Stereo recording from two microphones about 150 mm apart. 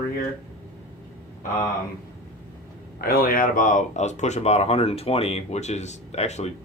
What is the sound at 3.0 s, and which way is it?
Speech, 85° left.